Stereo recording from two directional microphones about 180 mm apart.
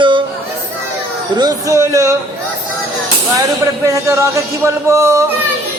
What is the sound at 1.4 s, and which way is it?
Speech, 20° right (ahead or behind).